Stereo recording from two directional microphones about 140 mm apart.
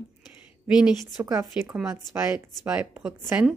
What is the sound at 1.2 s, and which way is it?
Speech, 20° right (ahead or behind).